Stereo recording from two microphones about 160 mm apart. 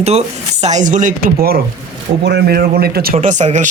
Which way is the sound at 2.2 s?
85° right.